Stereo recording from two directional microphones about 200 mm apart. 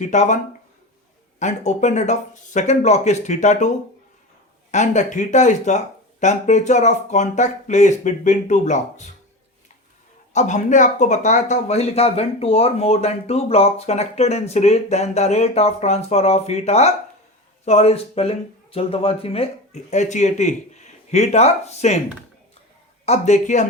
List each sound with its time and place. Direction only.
0.0 s speech: 35° left (ahead or behind)
1.4 s speech: 35° left (ahead or behind)
4.7 s speech: 35° left (ahead or behind)
10.3 s speech: 35° left (ahead or behind)
23.0 s speech: 35° left (ahead or behind)